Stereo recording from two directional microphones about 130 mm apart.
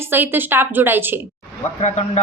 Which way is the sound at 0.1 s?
15° right (ahead or behind).